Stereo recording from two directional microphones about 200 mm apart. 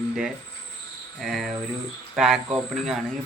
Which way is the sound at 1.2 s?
Centre (ahead or behind).